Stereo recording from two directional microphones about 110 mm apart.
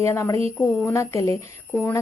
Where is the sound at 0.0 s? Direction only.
25° left (ahead or behind).